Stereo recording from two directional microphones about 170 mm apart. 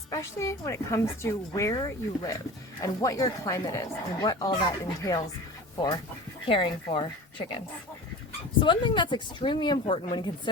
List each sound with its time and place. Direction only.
0.1 s a woman's voice: 15° left (ahead or behind)
6.4 s speech: 30° left (ahead or behind)
8.6 s speech: 30° left (ahead or behind)